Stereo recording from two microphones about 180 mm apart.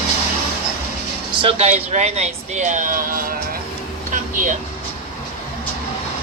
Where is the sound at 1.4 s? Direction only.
35° right (ahead or behind); by 3.4 s 50° right (ahead or behind).